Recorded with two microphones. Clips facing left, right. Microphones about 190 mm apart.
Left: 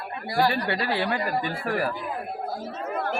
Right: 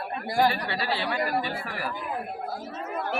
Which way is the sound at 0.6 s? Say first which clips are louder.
Left 3 dB; 55° left (ahead or behind).